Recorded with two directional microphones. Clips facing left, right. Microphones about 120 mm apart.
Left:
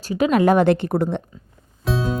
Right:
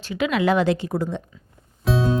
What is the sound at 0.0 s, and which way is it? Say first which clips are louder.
A woman's voice: left 4 dB; 40° left (ahead or behind).